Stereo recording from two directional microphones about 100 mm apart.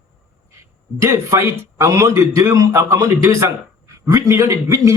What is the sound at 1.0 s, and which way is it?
Speech, 30° right (ahead or behind).